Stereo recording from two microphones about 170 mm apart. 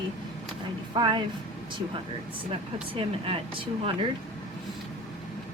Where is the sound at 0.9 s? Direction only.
30° right (ahead or behind).